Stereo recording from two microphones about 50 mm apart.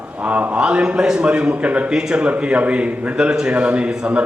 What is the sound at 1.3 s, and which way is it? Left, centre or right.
A man's voice, right.